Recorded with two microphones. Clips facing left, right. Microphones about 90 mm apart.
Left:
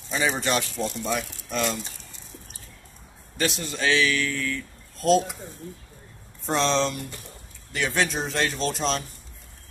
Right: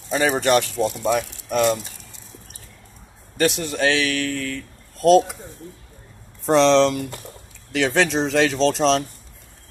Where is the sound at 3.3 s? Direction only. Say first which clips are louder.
Right 7 dB; 60° right (ahead or behind).